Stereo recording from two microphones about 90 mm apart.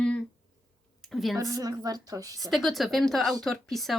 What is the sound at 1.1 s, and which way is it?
Speech, centre (ahead or behind).